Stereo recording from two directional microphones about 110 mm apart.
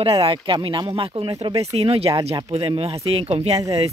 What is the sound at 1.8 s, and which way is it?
Speech, 65° right (ahead or behind).